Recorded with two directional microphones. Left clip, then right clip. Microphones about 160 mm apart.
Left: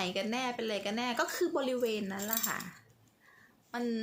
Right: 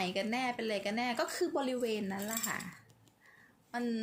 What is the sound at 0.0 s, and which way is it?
Speech, 20° left (ahead or behind).